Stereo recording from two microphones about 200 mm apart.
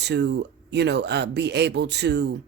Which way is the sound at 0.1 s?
60° right (ahead or behind).